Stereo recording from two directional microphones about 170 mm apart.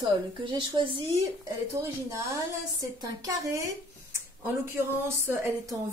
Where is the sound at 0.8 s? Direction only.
30° right (ahead or behind).